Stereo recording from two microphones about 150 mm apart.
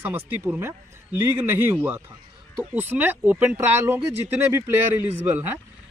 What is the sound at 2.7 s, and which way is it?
Speech, 15° right (ahead or behind).